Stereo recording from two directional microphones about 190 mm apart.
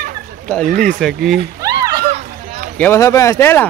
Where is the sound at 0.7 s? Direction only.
45° right (ahead or behind).